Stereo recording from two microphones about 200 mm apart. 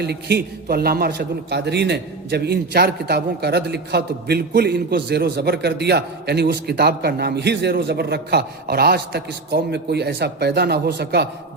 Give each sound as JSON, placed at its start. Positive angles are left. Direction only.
{"t": 0.0, "sound": "a man's voice", "side_deg": -55}